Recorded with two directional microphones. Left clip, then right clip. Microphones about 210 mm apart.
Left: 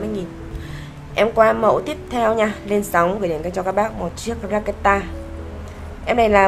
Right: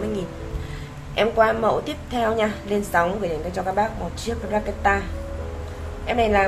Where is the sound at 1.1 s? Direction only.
15° left (ahead or behind).